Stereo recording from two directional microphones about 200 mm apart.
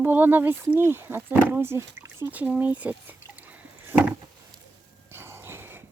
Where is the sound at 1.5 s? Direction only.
10° right (ahead or behind).